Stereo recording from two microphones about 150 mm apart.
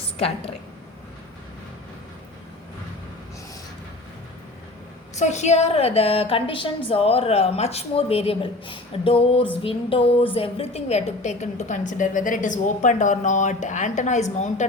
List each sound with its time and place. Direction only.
5.2 s a woman's voice: 50° left (ahead or behind)